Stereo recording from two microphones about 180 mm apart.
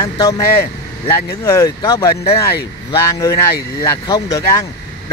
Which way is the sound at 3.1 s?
20° left (ahead or behind).